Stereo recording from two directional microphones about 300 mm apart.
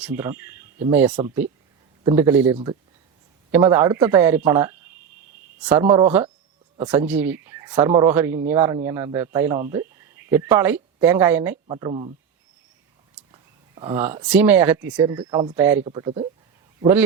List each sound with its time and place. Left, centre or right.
0.0 s speech: centre
13.3 s speech: centre